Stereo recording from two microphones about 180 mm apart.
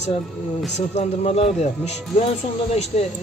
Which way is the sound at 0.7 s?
40° left (ahead or behind).